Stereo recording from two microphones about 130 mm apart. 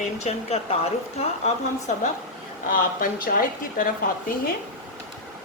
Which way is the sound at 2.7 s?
90° left.